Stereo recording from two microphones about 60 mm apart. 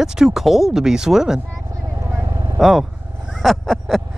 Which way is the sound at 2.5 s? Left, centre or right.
Centre.